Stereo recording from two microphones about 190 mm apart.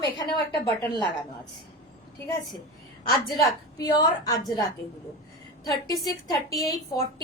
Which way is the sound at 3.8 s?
20° left (ahead or behind).